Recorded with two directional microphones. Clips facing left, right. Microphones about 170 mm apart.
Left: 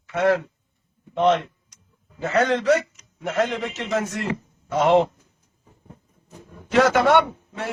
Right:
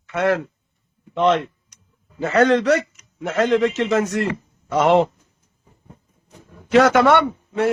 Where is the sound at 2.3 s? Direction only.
70° right (ahead or behind).